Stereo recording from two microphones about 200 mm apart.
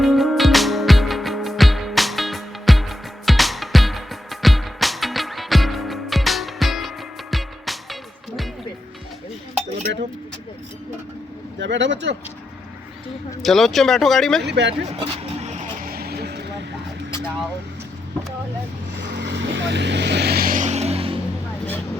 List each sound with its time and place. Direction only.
0.0 s music: centre (ahead or behind)
11.6 s speech: 60° right (ahead or behind)
13.4 s speech: centre (ahead or behind)
14.4 s speech: 60° right (ahead or behind)
14.9 s vehicle: 35° right (ahead or behind); by 16.6 s 55° right (ahead or behind)
19.0 s vehicle: 60° right (ahead or behind); by 21.2 s 30° right (ahead or behind)